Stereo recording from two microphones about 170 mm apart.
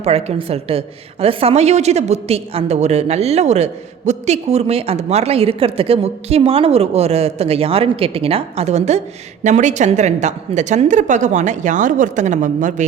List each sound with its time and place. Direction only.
0.0 s a woman's voice: 40° right (ahead or behind)